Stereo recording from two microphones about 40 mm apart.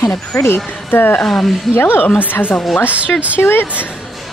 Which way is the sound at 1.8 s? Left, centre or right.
Left.